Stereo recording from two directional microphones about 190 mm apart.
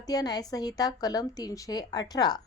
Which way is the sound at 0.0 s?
20° left (ahead or behind).